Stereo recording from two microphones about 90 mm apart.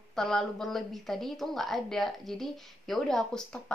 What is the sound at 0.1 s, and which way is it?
A woman's voice, 5° left (ahead or behind).